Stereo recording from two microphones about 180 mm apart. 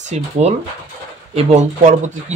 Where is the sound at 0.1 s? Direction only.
35° right (ahead or behind).